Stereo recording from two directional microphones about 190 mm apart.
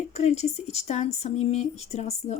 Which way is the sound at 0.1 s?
35° left (ahead or behind).